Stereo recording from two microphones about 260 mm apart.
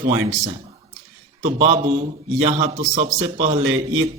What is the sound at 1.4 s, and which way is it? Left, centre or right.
Speech, right.